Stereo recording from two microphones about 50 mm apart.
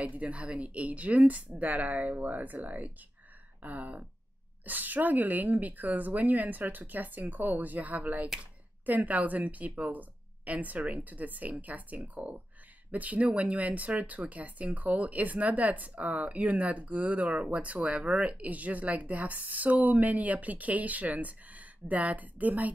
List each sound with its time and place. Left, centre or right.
0.1 s a woman's voice: right